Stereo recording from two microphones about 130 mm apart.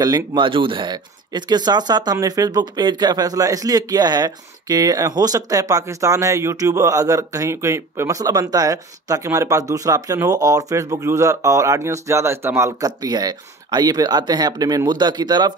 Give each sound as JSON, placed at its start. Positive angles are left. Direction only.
{"t": 0.0, "sound": "speech", "side_deg": -30}